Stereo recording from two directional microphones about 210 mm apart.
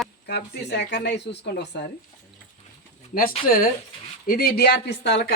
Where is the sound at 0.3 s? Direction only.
50° left (ahead or behind).